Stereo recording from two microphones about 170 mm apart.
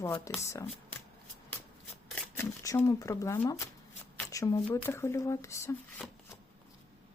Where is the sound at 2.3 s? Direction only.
15° left (ahead or behind).